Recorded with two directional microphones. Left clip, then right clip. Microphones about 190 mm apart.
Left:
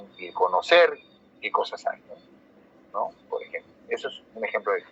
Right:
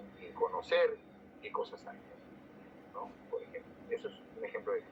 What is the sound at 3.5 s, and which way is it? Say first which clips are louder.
Telephone: left 9 dB; 50° left (ahead or behind).